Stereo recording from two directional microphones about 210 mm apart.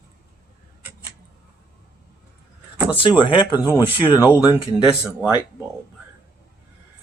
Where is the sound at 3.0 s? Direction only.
20° left (ahead or behind).